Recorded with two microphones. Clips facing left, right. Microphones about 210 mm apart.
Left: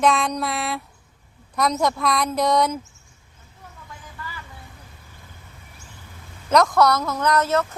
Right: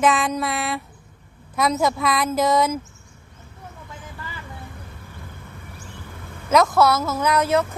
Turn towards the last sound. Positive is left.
turn(degrees=-10)  # may be behind; listen again after turning